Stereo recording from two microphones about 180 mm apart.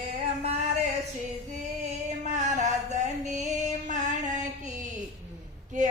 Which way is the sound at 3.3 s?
40° right (ahead or behind).